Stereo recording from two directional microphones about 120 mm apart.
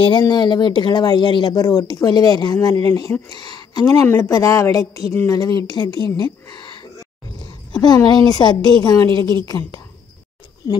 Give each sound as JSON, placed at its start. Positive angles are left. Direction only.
{"t": 0.0, "sound": "a woman's voice", "side_deg": 40}
{"t": 7.8, "sound": "speech", "side_deg": 35}